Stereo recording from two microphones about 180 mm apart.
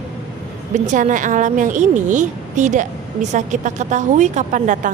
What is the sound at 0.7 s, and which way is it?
Speech, 40° right (ahead or behind).